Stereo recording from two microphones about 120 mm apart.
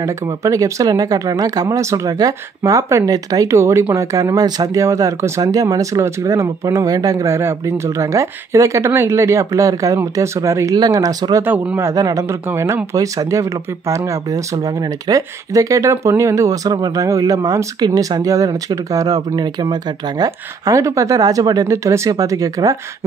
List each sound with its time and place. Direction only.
0.0 s speech: 25° right (ahead or behind)
11.4 s speech: 15° right (ahead or behind)
11.9 s speech: 30° right (ahead or behind)